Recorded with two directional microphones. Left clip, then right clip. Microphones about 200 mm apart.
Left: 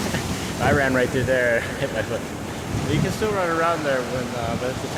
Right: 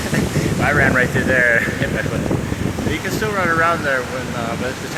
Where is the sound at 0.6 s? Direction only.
10° left (ahead or behind).